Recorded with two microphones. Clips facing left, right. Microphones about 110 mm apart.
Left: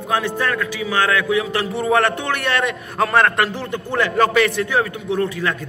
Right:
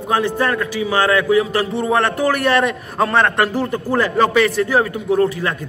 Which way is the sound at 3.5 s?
35° right (ahead or behind).